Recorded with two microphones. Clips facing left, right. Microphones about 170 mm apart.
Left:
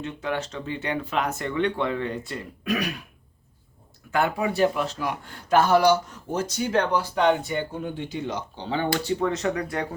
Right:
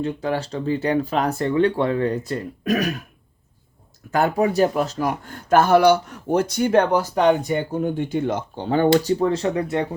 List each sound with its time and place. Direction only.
0.0 s speech: 35° right (ahead or behind)
4.1 s speech: 40° right (ahead or behind)
9.0 s speech: 35° right (ahead or behind)